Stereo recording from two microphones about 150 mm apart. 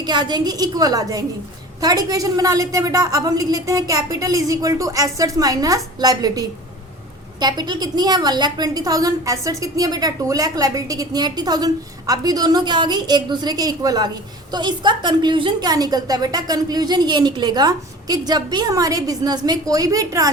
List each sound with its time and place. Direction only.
0.0 s a woman's voice: 30° right (ahead or behind)